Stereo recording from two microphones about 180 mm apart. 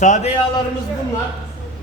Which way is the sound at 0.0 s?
40° left (ahead or behind).